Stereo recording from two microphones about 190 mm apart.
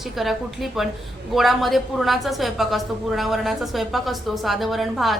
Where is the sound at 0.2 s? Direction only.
Centre (ahead or behind).